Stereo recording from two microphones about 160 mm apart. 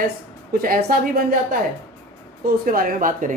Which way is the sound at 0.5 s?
65° right (ahead or behind).